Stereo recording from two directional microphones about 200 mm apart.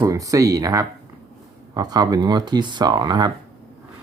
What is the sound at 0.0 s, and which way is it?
Speech, 15° right (ahead or behind).